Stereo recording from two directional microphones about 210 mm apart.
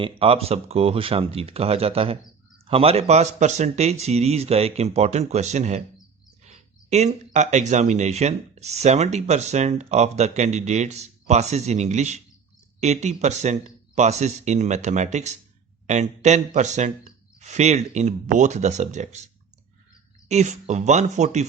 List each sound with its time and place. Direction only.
0.0 s speech: 25° right (ahead or behind)
20.2 s speech: 35° right (ahead or behind)